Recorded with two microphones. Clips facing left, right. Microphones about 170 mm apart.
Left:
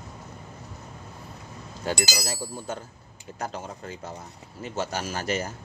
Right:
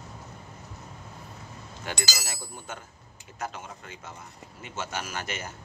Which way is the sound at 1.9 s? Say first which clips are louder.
Left 7 dB; 35° left (ahead or behind).